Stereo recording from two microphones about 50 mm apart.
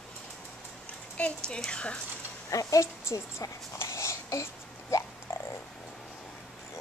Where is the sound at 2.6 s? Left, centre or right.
Left.